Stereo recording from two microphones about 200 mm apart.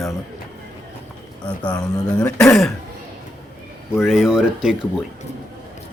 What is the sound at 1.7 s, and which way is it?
Speech, 20° left (ahead or behind).